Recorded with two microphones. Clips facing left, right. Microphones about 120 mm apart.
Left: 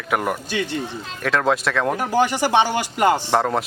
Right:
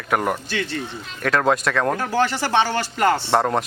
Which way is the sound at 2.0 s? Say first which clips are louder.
Left 2 dB; 15° left (ahead or behind).